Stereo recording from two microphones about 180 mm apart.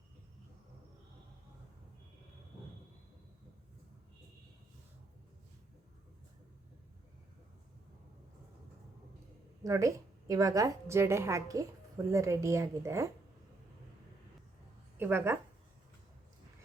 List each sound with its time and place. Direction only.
9.6 s a woman's voice: 20° right (ahead or behind)
14.9 s a woman's voice: 10° right (ahead or behind)